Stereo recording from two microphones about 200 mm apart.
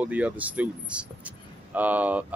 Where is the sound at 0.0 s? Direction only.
5° right (ahead or behind).